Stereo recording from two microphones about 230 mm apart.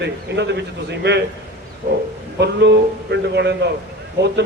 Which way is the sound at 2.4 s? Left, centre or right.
Right.